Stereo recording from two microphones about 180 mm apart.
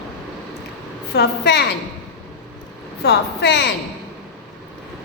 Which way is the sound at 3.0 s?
70° left (ahead or behind).